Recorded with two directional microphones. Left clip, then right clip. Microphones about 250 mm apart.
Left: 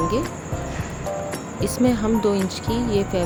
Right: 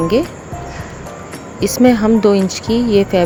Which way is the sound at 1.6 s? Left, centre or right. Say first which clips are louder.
Right 10 dB; right.